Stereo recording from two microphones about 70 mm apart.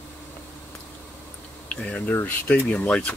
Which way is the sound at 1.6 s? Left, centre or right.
Centre.